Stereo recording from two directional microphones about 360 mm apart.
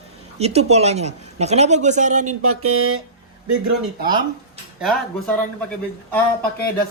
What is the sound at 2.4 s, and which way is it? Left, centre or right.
Speech, right.